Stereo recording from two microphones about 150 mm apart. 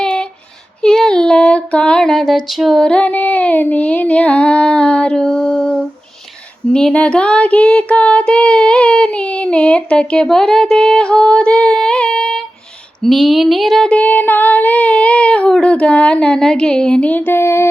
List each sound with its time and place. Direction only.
0.0 s female singing: 5° left (ahead or behind)
0.8 s a sound: 5° left (ahead or behind)
6.7 s child singing: 5° left (ahead or behind)
13.0 s female singing: centre (ahead or behind); by 17.7 s 15° left (ahead or behind)